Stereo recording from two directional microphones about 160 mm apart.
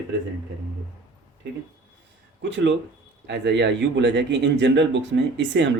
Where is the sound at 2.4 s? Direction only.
90° right.